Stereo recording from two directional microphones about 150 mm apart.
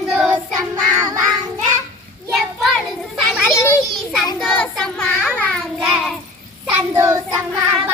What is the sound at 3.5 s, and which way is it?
Children playing, 20° left (ahead or behind).